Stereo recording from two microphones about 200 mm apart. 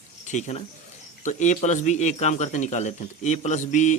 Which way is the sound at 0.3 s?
35° left (ahead or behind).